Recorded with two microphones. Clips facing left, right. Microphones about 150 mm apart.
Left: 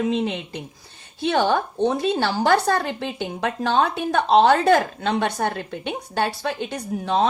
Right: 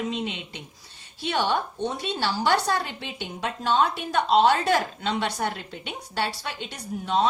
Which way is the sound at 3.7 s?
55° left (ahead or behind).